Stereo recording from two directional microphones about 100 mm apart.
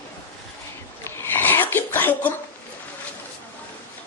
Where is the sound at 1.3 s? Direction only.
20° left (ahead or behind).